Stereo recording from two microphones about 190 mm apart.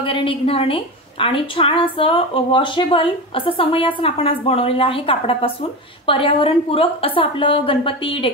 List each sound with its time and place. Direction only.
0.0 s a woman's voice: 25° left (ahead or behind)